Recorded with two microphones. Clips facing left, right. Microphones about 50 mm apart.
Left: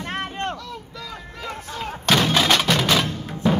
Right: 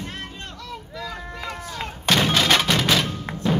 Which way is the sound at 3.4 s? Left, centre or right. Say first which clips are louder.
Left 2 dB; centre.